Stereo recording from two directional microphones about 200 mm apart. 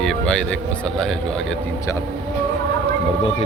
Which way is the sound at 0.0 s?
5° left (ahead or behind).